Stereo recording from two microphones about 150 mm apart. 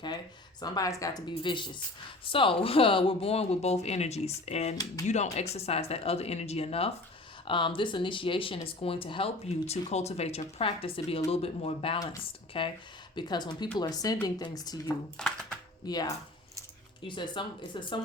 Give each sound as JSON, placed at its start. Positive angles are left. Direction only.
{"t": 0.6, "sound": "a woman's voice", "side_deg": 25}